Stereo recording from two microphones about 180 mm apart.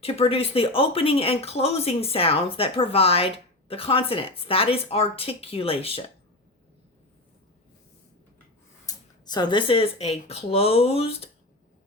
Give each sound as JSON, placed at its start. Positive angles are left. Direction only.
{"t": 0.0, "sound": "speech", "side_deg": 35}
{"t": 8.9, "sound": "speech", "side_deg": 25}